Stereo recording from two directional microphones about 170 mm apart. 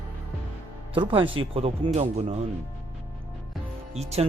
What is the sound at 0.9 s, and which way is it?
Speech, 30° right (ahead or behind).